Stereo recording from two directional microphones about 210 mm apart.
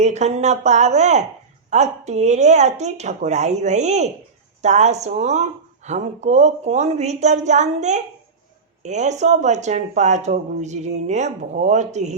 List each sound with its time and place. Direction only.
0.0 s speech: 35° right (ahead or behind)